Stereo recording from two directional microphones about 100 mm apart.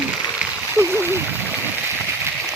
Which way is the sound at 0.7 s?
25° right (ahead or behind).